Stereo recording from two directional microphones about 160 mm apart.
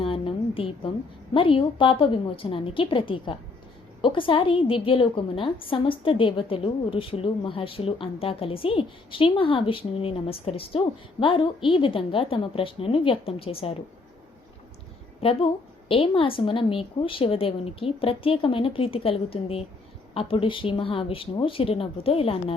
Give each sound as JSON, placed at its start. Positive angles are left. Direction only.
{"t": 0.0, "sound": "a sound", "side_deg": 35}
{"t": 1.3, "sound": "a woman's voice", "side_deg": 35}
{"t": 15.2, "sound": "a woman's voice", "side_deg": 40}